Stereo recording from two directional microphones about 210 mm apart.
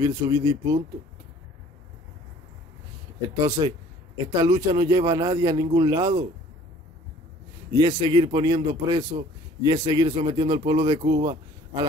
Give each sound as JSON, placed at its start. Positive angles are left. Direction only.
{"t": 0.0, "sound": "speech", "side_deg": -20}
{"t": 3.4, "sound": "speech", "side_deg": -20}
{"t": 7.7, "sound": "speech", "side_deg": -20}